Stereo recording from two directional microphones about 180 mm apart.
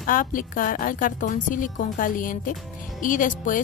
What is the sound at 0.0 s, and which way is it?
Speech, 50° left (ahead or behind).